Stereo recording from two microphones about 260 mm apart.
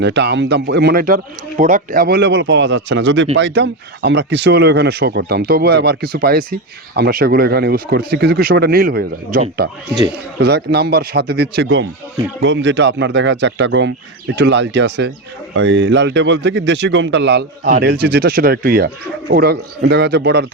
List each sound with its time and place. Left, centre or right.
0.0 s speech: right